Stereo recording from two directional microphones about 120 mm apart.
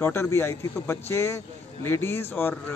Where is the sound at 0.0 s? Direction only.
20° left (ahead or behind).